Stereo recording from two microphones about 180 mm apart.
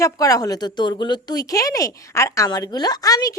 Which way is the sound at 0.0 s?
20° left (ahead or behind).